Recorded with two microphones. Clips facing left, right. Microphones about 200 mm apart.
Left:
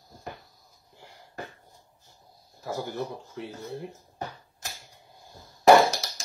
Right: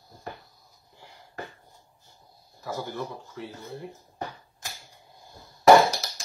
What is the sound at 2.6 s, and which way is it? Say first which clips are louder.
Speech: left 1 dB; 55° left (ahead or behind).